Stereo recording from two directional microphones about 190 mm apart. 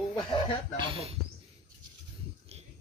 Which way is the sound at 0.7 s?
30° right (ahead or behind).